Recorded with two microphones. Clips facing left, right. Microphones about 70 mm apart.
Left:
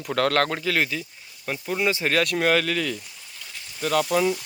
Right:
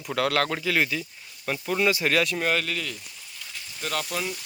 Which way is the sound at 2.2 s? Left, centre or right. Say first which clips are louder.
Left 4 dB; left.